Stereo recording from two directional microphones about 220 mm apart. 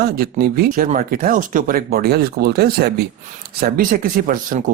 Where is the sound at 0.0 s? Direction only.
45° right (ahead or behind).